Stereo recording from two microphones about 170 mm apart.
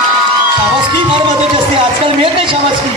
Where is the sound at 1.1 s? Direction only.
30° right (ahead or behind).